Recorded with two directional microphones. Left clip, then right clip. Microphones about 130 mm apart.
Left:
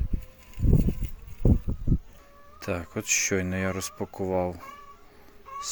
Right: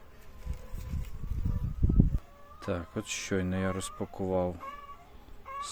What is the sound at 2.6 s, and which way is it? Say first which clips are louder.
Speech: left 3 dB; 10° left (ahead or behind).